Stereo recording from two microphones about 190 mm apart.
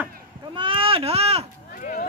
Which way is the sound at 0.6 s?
30° right (ahead or behind).